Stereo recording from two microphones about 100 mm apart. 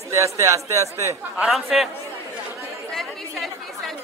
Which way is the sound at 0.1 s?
30° right (ahead or behind).